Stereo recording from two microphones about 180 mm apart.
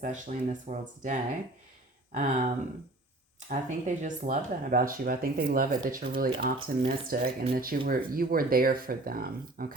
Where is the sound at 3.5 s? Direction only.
45° right (ahead or behind).